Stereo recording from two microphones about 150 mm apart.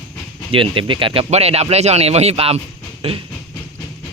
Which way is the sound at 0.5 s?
35° right (ahead or behind).